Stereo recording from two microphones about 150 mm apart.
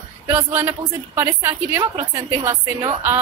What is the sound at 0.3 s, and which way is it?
A woman's voice, 10° right (ahead or behind).